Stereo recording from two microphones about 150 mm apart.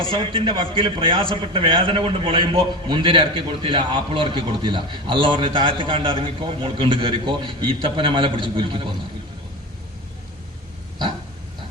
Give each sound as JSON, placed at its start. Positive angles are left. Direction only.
{"t": 0.1, "sound": "a man's voice", "side_deg": -35}